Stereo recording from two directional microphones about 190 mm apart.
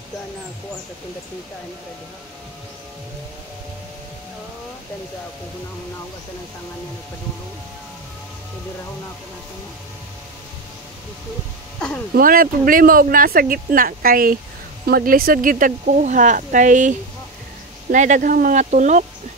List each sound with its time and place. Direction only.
12.1 s speech: 50° right (ahead or behind)
17.9 s speech: 40° right (ahead or behind)